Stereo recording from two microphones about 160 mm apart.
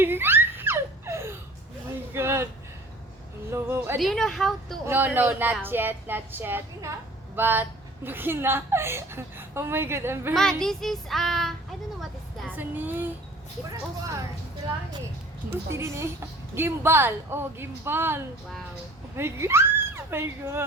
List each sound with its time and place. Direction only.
0.0 s giggle: 15° right (ahead or behind)
2.1 s a sound: 15° right (ahead or behind)
3.5 s a sound: 15° right (ahead or behind)
3.9 s child singing: centre (ahead or behind)
4.9 s speech: 10° right (ahead or behind)
10.6 s child singing: centre (ahead or behind)
12.5 s speech: 10° right (ahead or behind)
15.7 s speech: 15° right (ahead or behind)